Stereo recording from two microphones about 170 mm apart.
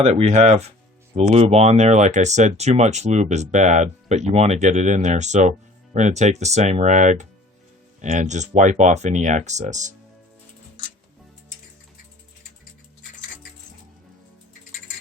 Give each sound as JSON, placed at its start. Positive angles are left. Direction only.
{"t": 0.0, "sound": "speech", "side_deg": -40}